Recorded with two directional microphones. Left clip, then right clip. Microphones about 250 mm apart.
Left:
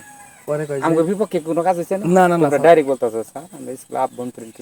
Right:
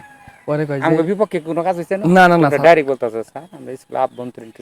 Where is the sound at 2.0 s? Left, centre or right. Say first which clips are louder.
Right 5 dB; right.